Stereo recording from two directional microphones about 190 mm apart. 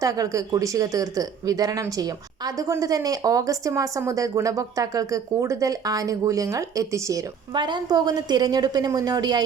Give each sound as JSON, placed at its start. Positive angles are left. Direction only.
{"t": 0.0, "sound": "speech", "side_deg": -15}